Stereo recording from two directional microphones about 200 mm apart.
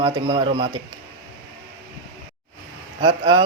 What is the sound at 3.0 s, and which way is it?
Speech, 25° right (ahead or behind).